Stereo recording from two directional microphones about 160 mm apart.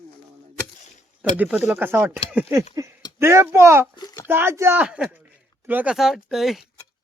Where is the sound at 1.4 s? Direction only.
10° right (ahead or behind).